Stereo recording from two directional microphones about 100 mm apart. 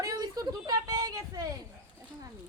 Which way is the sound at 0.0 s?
35° right (ahead or behind).